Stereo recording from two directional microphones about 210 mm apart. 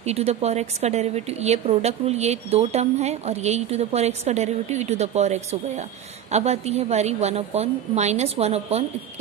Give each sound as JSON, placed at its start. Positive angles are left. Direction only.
{"t": 0.0, "sound": "a woman's voice", "side_deg": -30}